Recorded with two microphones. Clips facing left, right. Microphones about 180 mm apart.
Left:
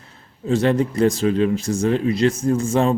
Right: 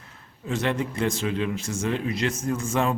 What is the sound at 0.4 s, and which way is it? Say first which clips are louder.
Speech: left 8 dB; 35° left (ahead or behind).